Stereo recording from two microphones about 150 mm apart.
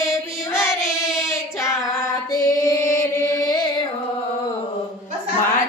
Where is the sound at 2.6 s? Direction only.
20° left (ahead or behind).